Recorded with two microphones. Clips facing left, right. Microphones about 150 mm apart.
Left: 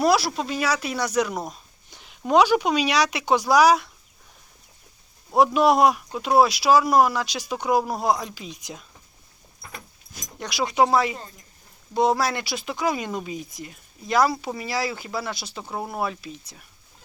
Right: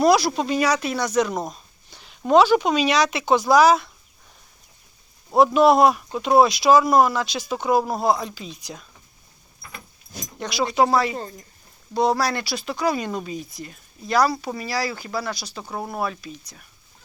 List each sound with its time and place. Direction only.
0.0 s speech: 5° left (ahead or behind)
1.5 s a sound: 15° left (ahead or behind)
2.2 s speech: 10° left (ahead or behind)
5.3 s speech: 10° left (ahead or behind)
10.4 s speech: 10° left (ahead or behind)